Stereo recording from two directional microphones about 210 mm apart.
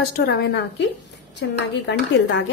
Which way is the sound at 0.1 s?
50° left (ahead or behind).